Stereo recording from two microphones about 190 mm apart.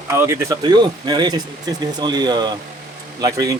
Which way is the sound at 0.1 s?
15° right (ahead or behind).